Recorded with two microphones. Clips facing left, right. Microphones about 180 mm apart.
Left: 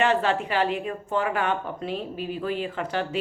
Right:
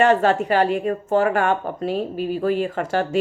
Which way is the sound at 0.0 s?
45° right (ahead or behind).